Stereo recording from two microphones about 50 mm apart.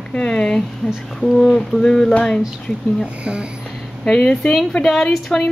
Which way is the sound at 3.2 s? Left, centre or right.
Right.